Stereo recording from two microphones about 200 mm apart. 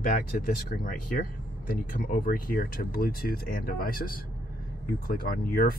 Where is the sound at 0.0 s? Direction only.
45° left (ahead or behind).